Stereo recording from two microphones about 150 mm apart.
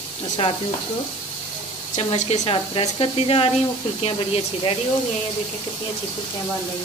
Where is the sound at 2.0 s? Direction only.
45° left (ahead or behind).